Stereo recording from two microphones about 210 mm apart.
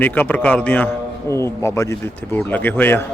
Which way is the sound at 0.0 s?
5° left (ahead or behind).